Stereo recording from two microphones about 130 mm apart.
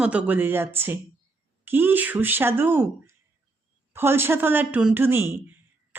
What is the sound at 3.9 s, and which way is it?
Speech, 15° right (ahead or behind).